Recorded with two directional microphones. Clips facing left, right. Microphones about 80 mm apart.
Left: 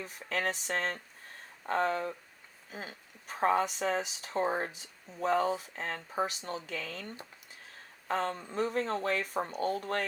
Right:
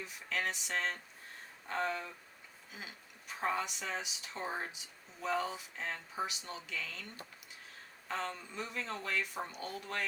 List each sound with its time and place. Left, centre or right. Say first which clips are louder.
0.0 s speech: left 4 dB; left